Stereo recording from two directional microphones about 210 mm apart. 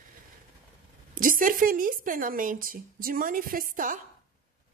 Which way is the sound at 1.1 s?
40° right (ahead or behind).